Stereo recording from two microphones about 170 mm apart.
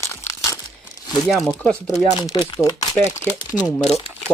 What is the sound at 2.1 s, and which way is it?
Speech, 25° left (ahead or behind).